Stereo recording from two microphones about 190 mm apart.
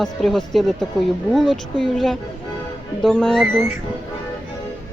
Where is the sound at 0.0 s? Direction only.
Centre (ahead or behind).